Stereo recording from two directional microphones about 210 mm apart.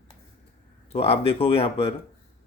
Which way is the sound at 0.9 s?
30° left (ahead or behind).